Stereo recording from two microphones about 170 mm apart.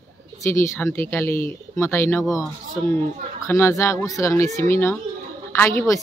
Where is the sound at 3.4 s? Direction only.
15° left (ahead or behind).